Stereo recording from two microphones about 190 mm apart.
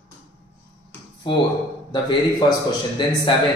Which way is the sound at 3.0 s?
25° left (ahead or behind).